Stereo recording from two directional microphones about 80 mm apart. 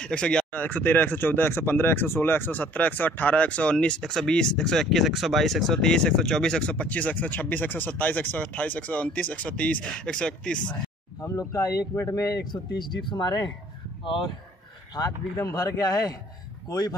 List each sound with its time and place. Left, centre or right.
0.0 s speech: centre
0.5 s speech: left
11.2 s speech: left
11.9 s speech: left
12.4 s speech: left
15.3 s speech: left